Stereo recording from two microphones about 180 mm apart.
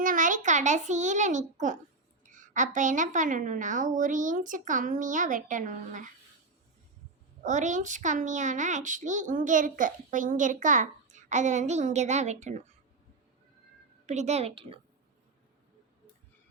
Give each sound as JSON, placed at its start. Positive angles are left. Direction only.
{"t": 0.0, "sound": "a child's voice", "side_deg": -45}
{"t": 7.4, "sound": "a woman's voice", "side_deg": -45}
{"t": 14.1, "sound": "a woman's voice", "side_deg": -40}